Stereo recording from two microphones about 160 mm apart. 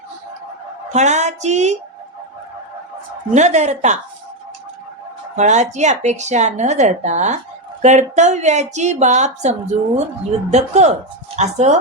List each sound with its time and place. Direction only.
0.9 s speech: 45° right (ahead or behind)
3.3 s speech: 45° right (ahead or behind)
5.4 s speech: 45° right (ahead or behind)